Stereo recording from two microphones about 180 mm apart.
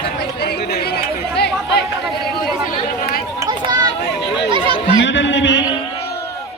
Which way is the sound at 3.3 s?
20° right (ahead or behind).